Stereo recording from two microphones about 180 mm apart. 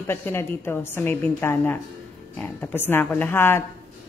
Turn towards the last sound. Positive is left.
turn(degrees=15)  # may be behind; listen again after turning